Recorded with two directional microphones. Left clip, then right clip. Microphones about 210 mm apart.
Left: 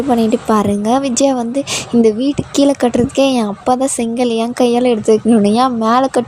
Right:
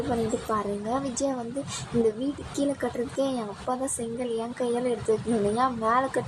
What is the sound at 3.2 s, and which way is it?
Speech, 45° left (ahead or behind).